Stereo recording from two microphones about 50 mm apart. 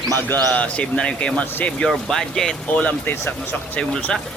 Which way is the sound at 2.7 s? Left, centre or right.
Left.